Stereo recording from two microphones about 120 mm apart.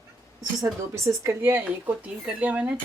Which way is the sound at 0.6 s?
25° right (ahead or behind).